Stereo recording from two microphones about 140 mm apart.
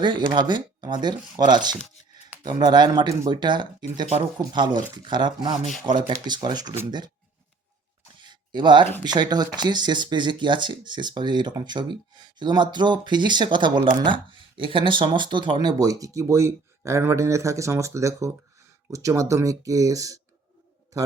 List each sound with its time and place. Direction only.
0.0 s speech: 35° right (ahead or behind)
8.2 s a sound: 35° right (ahead or behind)
9.1 s speech: 30° right (ahead or behind)
20.9 s bird: 25° right (ahead or behind)